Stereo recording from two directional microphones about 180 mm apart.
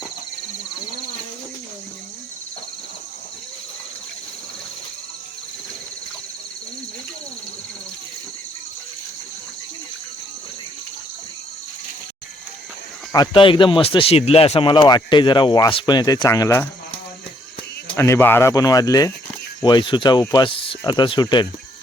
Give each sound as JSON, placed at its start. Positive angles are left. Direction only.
{"t": 13.1, "sound": "speech", "side_deg": 30}
{"t": 17.9, "sound": "speech", "side_deg": 15}